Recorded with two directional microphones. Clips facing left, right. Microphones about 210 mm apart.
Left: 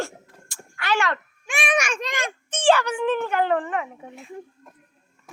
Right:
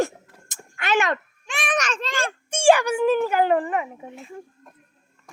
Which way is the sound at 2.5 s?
10° right (ahead or behind).